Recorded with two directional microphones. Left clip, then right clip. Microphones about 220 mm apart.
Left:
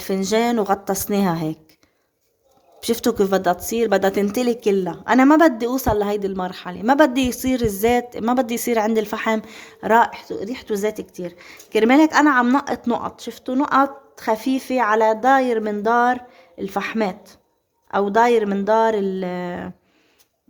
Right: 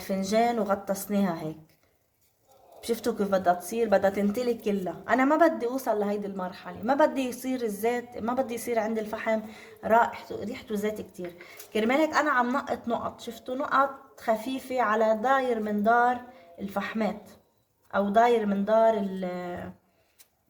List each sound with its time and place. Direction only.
0.0 s speech: 50° left (ahead or behind)
2.8 s speech: 50° left (ahead or behind)